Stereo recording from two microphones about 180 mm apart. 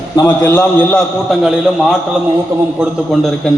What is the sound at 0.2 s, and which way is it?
A man's voice, 15° left (ahead or behind).